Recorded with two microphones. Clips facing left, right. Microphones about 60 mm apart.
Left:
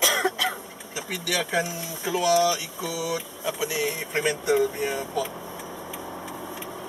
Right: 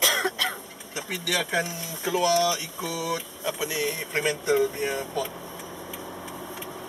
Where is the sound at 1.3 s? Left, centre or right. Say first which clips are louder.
Left 1 dB; centre.